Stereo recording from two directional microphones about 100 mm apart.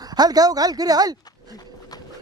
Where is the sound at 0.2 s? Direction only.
40° right (ahead or behind).